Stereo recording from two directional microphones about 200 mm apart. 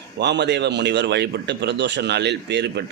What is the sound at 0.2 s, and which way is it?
A man's voice, 60° right (ahead or behind).